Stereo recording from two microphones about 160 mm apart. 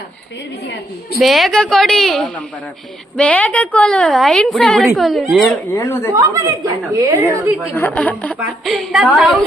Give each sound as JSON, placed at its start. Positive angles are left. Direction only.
{"t": 1.2, "sound": "a woman's voice", "side_deg": 0}
{"t": 5.7, "sound": "speech", "side_deg": 15}
{"t": 6.1, "sound": "a woman's voice", "side_deg": -20}
{"t": 7.8, "sound": "a woman's voice", "side_deg": 10}